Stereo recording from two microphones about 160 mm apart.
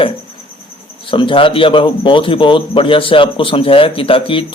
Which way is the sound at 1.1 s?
30° left (ahead or behind).